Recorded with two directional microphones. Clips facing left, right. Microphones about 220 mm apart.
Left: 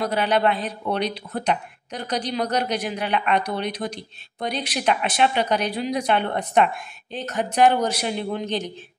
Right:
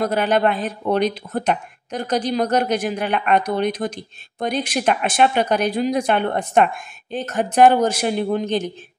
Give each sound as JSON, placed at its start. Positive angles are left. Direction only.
{"t": 0.0, "sound": "speech", "side_deg": -50}